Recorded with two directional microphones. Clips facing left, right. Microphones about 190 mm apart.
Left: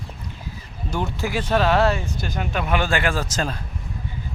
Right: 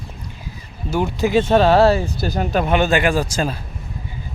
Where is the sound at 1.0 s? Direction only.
20° right (ahead or behind); by 2.7 s 35° right (ahead or behind).